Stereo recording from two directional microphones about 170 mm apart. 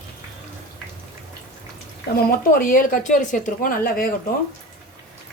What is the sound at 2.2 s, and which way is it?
Speech, 60° left (ahead or behind).